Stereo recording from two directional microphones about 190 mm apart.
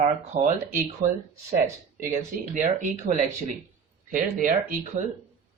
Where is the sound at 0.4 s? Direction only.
45° right (ahead or behind).